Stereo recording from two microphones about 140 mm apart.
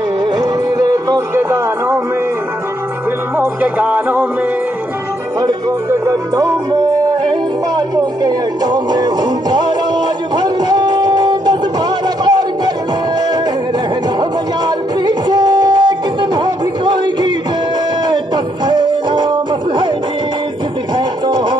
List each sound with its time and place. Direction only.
0.2 s music: 30° right (ahead or behind)
3.3 s music: 10° right (ahead or behind)
5.4 s music: 25° right (ahead or behind)
12.3 s a sound: 30° right (ahead or behind)
15.0 s music: 30° right (ahead or behind)
20.9 s music: 30° right (ahead or behind)